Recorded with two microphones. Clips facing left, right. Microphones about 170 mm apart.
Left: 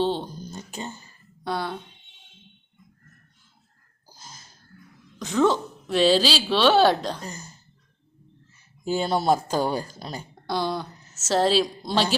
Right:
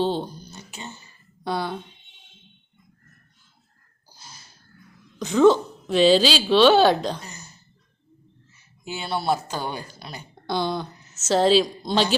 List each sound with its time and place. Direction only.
0.0 s a woman's voice: centre (ahead or behind)
0.7 s speech: 40° left (ahead or behind)
1.5 s a woman's voice: centre (ahead or behind)
5.2 s a woman's voice: centre (ahead or behind)
7.2 s speech: 35° left (ahead or behind)
8.8 s speech: 40° left (ahead or behind)
10.4 s a woman's voice: centre (ahead or behind)